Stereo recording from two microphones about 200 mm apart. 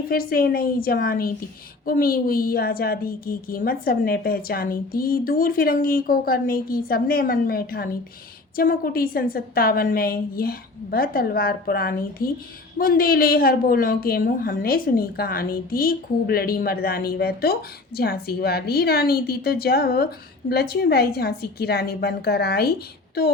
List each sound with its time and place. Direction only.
0.1 s a woman's voice: 50° left (ahead or behind)